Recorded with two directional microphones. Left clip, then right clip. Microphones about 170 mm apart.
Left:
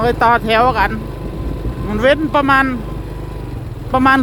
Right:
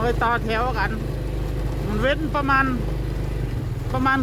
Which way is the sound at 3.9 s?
25° left (ahead or behind).